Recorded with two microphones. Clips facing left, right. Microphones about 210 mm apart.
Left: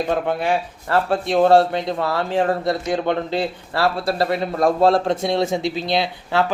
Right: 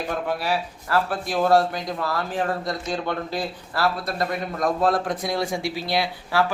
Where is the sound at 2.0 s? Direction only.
65° left (ahead or behind).